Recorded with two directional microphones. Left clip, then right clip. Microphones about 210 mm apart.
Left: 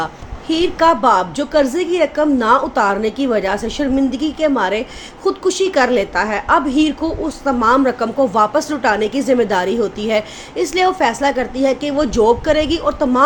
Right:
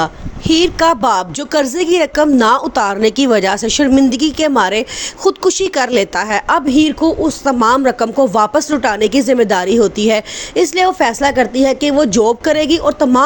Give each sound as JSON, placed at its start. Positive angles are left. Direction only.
{"t": 0.0, "sound": "speech", "side_deg": -40}